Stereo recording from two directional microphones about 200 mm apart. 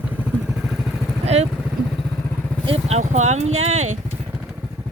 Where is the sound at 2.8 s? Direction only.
35° right (ahead or behind).